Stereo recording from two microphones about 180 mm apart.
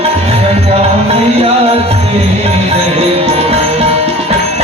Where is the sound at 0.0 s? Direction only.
35° right (ahead or behind).